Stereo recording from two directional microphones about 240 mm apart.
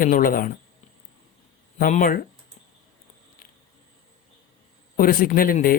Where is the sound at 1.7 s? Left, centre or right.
Left.